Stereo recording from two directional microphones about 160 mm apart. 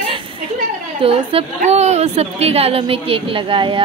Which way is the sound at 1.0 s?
35° right (ahead or behind).